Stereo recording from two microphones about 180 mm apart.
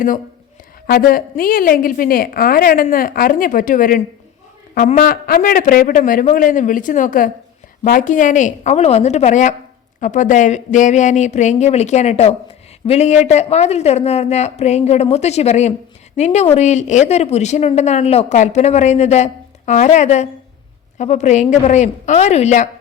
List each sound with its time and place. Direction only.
0.9 s a woman's voice: 55° left (ahead or behind)